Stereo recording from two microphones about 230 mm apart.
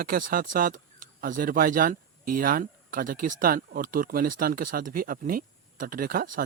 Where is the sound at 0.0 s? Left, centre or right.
Right.